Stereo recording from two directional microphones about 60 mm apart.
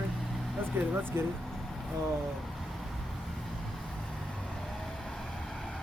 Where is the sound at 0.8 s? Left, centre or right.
Right.